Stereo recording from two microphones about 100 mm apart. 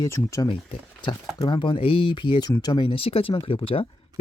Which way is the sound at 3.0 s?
70° left (ahead or behind).